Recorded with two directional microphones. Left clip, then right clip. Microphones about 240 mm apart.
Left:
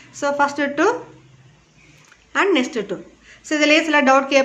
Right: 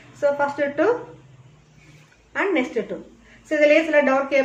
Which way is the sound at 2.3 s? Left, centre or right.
Left.